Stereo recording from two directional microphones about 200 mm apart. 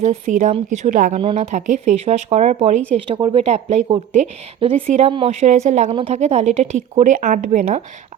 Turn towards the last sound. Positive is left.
turn(degrees=-35)  # may be behind; listen again after turning